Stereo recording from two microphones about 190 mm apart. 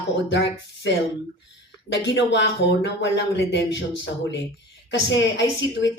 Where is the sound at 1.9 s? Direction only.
70° left (ahead or behind).